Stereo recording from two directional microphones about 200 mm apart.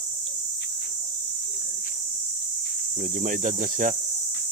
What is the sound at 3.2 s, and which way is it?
Speech, 40° right (ahead or behind).